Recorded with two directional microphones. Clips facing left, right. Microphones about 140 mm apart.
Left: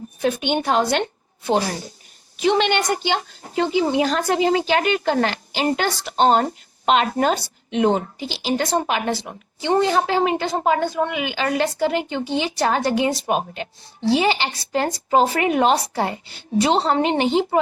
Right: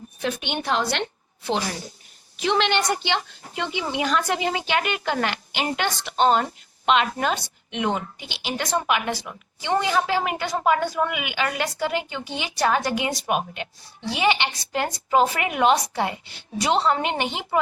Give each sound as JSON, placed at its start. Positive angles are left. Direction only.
{"t": 0.2, "sound": "a woman's voice", "side_deg": 50}
{"t": 2.5, "sound": "speech", "side_deg": 50}